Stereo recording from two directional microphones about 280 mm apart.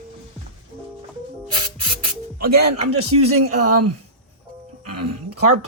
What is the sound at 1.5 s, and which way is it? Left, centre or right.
Music, right.